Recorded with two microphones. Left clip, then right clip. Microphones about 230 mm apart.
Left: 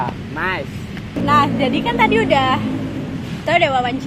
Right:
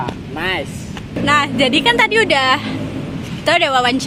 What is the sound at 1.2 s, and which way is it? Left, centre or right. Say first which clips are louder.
A woman's voice: right 1 dB; right.